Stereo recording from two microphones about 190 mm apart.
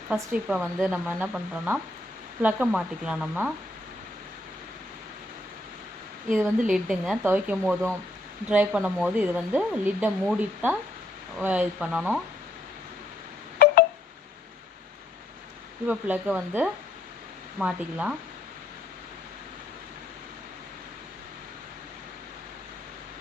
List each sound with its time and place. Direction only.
0.1 s speech: 5° right (ahead or behind)
6.3 s speech: 5° right (ahead or behind)
13.6 s a sound: 50° left (ahead or behind)
15.9 s speech: 5° right (ahead or behind)